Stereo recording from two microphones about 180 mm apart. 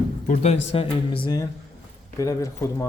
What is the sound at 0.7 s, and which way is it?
Speech, 30° left (ahead or behind).